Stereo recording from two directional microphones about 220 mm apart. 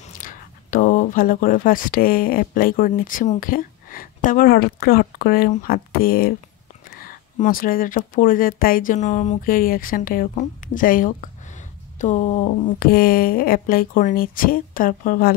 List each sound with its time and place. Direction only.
0.2 s speech: 40° left (ahead or behind)